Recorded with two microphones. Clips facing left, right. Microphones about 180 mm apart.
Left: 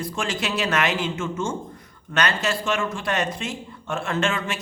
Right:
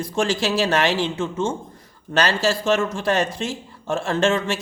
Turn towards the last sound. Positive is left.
turn(degrees=-35)  # may be behind; listen again after turning